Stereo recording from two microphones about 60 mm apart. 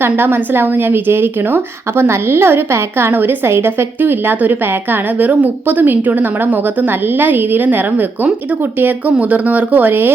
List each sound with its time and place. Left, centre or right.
0.0 s a woman's voice: right